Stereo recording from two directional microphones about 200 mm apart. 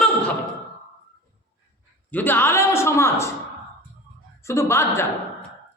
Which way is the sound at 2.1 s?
10° left (ahead or behind).